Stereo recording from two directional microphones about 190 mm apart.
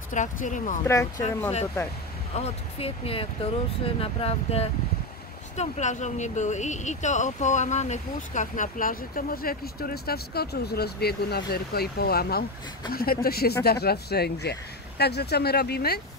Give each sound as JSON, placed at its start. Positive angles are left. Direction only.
{"t": 0.1, "sound": "speech", "side_deg": 40}
{"t": 0.8, "sound": "speech", "side_deg": 15}
{"t": 2.3, "sound": "speech", "side_deg": 30}